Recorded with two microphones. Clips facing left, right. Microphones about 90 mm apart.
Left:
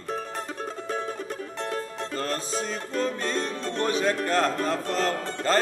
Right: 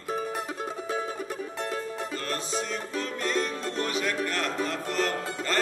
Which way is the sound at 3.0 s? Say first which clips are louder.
Even; 30° left (ahead or behind).